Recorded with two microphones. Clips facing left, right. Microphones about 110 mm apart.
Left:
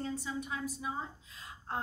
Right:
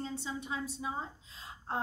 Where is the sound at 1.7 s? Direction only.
30° right (ahead or behind).